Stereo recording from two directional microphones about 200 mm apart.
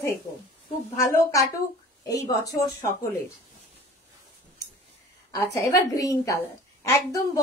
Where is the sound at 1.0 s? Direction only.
15° left (ahead or behind).